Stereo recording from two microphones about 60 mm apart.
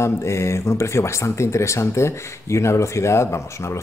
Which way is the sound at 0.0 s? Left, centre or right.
Left.